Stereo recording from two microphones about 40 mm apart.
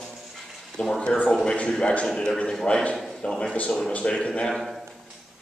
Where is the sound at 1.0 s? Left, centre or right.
Left.